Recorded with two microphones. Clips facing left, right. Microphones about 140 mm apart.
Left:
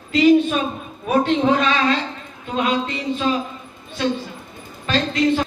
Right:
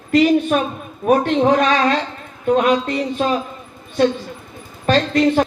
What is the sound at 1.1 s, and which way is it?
A man's voice, 50° right (ahead or behind).